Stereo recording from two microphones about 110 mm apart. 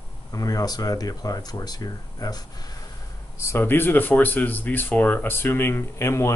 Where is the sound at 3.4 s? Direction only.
25° left (ahead or behind).